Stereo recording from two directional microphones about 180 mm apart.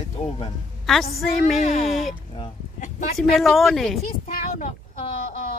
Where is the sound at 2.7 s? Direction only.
45° left (ahead or behind).